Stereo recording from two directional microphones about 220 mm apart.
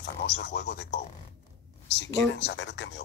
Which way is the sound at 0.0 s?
55° left (ahead or behind).